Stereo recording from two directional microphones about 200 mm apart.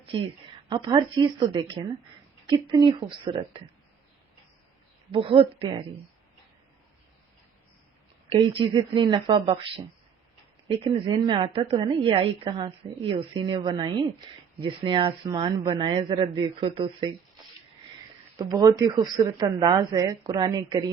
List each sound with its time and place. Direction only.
0.7 s a woman's voice: 25° right (ahead or behind)
5.1 s a woman's voice: 25° right (ahead or behind)
8.3 s a woman's voice: 25° right (ahead or behind)
18.3 s a woman's voice: 20° right (ahead or behind)